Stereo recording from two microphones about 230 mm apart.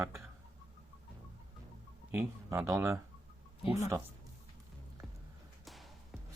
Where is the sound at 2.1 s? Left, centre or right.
Centre.